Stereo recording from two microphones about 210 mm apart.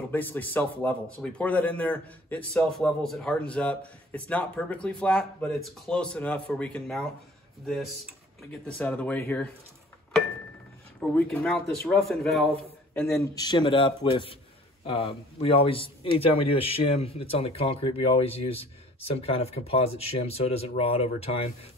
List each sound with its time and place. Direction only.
0.1 s speech: 10° left (ahead or behind)
11.0 s speech: centre (ahead or behind)
13.2 s a man's voice: 20° left (ahead or behind)